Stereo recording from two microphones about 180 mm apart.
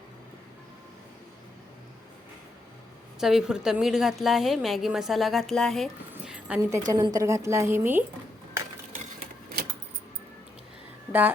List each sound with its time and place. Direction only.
3.2 s a woman's voice: centre (ahead or behind)